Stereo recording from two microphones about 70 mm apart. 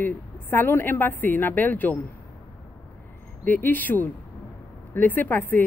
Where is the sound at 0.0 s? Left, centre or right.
Left.